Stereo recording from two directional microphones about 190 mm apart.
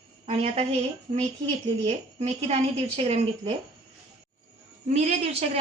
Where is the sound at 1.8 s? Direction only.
35° right (ahead or behind).